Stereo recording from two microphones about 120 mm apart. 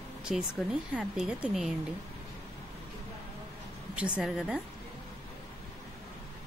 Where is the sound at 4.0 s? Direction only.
5° right (ahead or behind).